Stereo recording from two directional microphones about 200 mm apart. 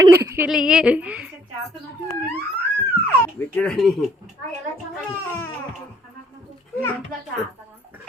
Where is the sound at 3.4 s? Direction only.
5° left (ahead or behind).